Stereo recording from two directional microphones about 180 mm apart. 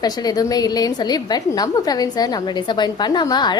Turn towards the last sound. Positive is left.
turn(degrees=25)  # may be behind; listen again after turning